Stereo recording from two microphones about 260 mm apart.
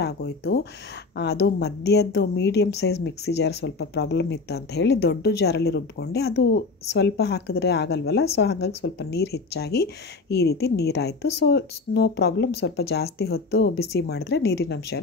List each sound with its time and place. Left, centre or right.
0.0 s speech: left